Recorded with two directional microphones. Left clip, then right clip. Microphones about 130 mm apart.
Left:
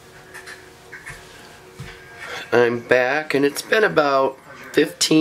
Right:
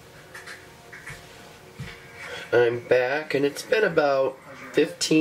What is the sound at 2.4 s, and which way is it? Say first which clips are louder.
Speech: left 4 dB; 35° left (ahead or behind).